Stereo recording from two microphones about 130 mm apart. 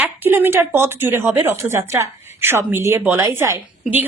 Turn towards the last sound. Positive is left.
turn(degrees=-20)  # may be behind; listen again after turning